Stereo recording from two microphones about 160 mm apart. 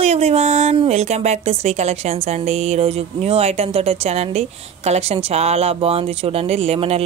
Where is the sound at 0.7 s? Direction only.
45° right (ahead or behind).